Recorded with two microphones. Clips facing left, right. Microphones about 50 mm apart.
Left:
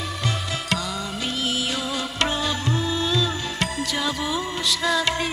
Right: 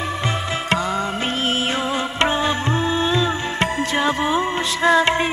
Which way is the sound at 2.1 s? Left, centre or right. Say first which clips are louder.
Right 5 dB; right.